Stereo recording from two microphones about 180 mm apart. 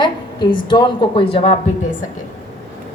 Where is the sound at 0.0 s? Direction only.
25° left (ahead or behind).